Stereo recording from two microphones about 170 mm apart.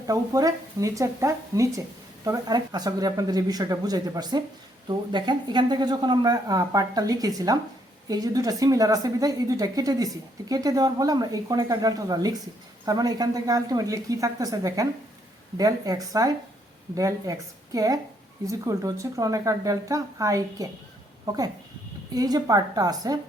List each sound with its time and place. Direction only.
0.1 s speech: 20° right (ahead or behind)
22.1 s speech: 20° right (ahead or behind)